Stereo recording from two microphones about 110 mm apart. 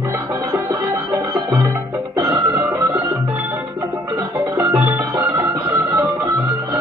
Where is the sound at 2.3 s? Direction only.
20° right (ahead or behind).